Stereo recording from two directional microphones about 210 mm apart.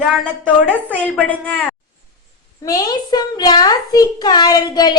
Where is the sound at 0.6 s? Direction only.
10° right (ahead or behind).